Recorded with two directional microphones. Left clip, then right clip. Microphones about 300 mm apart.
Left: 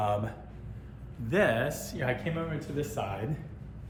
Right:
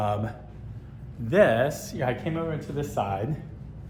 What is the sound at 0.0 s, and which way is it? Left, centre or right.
A man's voice, centre.